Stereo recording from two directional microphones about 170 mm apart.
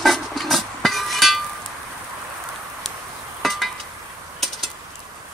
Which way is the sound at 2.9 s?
Centre (ahead or behind).